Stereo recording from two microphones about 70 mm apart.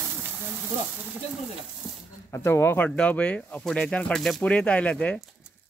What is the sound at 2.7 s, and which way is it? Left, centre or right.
Speech, left.